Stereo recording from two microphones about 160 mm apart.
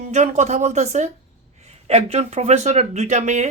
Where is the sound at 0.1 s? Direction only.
45° right (ahead or behind).